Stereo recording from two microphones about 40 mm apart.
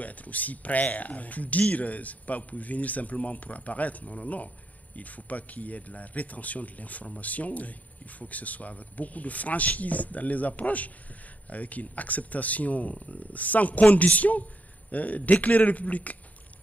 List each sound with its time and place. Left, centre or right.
0.0 s speech: left